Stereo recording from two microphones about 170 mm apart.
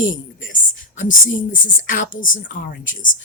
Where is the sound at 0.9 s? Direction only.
50° left (ahead or behind).